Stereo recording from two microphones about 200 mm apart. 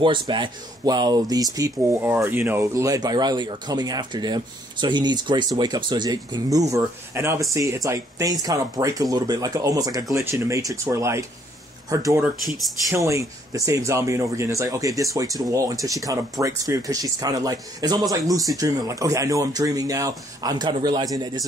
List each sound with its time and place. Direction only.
0.0 s speech: 25° right (ahead or behind)
12.4 s speech: centre (ahead or behind)
12.9 s speech: 15° right (ahead or behind)